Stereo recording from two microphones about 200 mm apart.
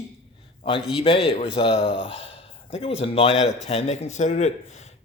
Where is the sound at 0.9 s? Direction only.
25° left (ahead or behind).